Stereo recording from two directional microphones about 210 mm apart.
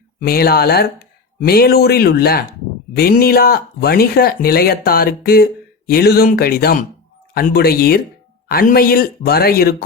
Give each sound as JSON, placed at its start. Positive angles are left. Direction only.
{"t": 0.2, "sound": "speech", "side_deg": 45}